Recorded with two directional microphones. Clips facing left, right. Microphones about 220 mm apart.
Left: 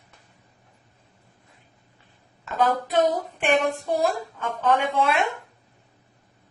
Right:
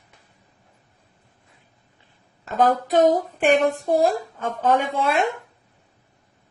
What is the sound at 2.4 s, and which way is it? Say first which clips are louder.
A woman's voice: right 3 dB; 40° right (ahead or behind).